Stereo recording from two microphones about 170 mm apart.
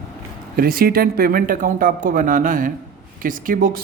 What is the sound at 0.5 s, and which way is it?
Speech, 60° right (ahead or behind).